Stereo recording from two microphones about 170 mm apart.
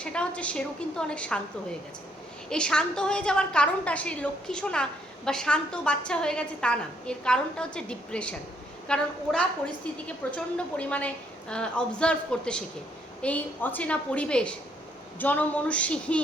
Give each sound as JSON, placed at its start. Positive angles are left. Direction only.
{"t": 0.0, "sound": "a woman's voice", "side_deg": 5}
{"t": 2.5, "sound": "a woman's voice", "side_deg": 5}